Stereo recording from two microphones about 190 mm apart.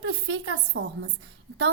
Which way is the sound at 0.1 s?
70° right (ahead or behind).